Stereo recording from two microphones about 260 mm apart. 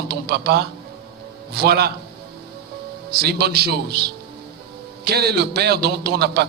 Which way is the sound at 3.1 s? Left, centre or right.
Right.